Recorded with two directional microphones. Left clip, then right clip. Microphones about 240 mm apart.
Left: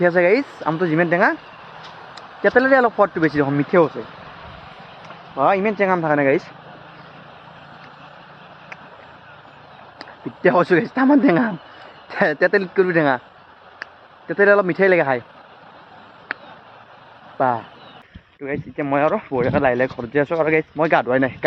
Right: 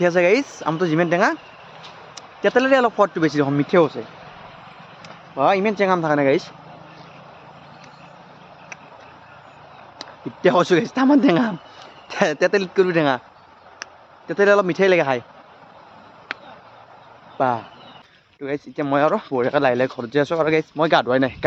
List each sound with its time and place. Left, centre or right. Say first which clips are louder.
0.0 s speech: left 1 dB; centre
2.4 s speech: left 2 dB; centre
4.2 s vehicle: left 2 dB; left
5.0 s speech: left 1 dB; centre
10.0 s speech: even; centre
14.3 s speech: left 1 dB; centre
17.3 s speech: left 1 dB; centre